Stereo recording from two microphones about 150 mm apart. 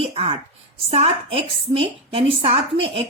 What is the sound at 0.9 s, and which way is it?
A woman's voice, 45° right (ahead or behind).